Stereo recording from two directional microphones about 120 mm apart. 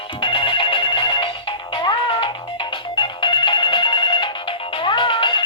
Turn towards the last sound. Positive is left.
turn(degrees=45)  # may be behind; listen again after turning